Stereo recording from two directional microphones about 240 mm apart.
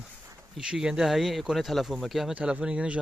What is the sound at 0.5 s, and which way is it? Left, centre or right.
Speech, centre.